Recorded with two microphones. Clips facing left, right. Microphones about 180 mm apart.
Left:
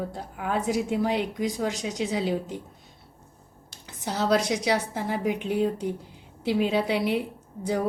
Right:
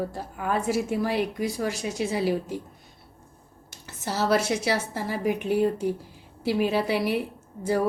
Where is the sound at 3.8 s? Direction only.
15° left (ahead or behind).